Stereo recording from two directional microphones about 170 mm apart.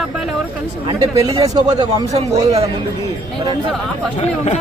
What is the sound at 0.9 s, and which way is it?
Speech, 20° right (ahead or behind).